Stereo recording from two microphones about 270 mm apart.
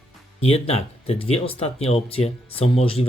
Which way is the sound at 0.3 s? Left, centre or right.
Left.